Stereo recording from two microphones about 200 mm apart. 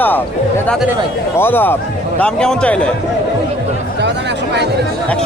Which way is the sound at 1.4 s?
10° left (ahead or behind).